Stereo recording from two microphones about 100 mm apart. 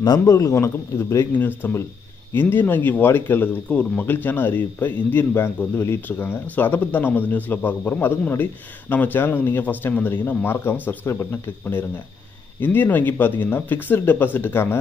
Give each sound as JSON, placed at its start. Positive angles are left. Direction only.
{"t": 0.0, "sound": "speech", "side_deg": 40}